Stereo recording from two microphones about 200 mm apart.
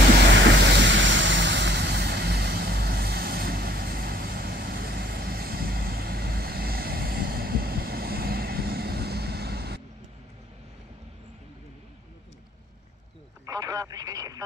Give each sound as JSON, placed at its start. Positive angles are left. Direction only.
{"t": 0.4, "sound": "vehicle", "side_deg": -65}
{"t": 13.5, "sound": "radio", "side_deg": -20}